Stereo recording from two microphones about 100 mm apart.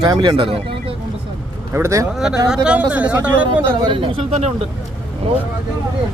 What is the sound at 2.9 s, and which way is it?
Speech, 15° right (ahead or behind).